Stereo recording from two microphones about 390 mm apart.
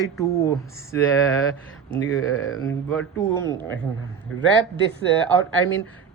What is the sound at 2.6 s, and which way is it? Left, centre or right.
Speech, centre.